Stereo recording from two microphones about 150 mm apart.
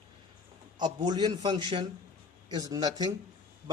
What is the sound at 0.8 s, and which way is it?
A man's voice, 30° right (ahead or behind).